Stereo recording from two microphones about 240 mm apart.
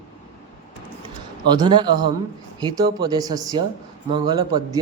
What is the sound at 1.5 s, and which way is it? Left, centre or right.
Speech, centre.